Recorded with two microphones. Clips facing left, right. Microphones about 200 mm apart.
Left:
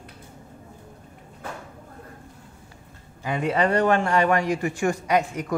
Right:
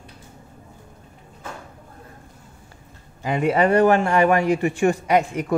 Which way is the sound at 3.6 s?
10° right (ahead or behind).